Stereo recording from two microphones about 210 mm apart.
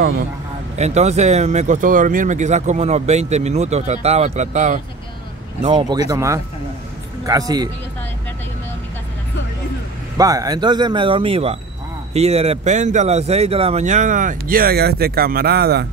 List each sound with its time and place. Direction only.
0.7 s speech: 30° right (ahead or behind)
5.6 s a man's voice: 25° right (ahead or behind)
10.1 s speech: 15° right (ahead or behind); by 15.9 s 50° right (ahead or behind)